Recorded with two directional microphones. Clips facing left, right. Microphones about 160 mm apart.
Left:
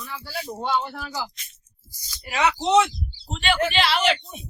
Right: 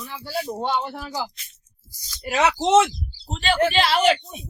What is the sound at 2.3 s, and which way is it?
A woman's voice, 45° right (ahead or behind).